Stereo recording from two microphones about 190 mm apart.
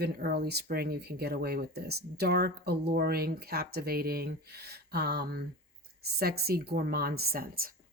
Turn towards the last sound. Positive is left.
turn(degrees=-50)  # may be behind; listen again after turning